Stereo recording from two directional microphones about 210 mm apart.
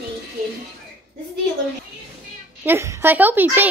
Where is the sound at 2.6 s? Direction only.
15° right (ahead or behind).